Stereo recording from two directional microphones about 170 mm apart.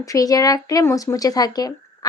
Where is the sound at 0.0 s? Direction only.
20° left (ahead or behind).